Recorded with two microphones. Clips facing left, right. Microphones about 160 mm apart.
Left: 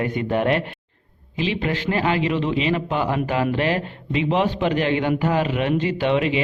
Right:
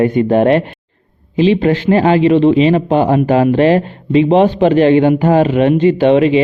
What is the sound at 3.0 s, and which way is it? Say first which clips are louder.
Speech: right 11 dB; 45° right (ahead or behind).